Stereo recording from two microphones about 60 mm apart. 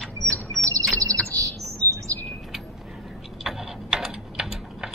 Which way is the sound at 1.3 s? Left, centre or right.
Right.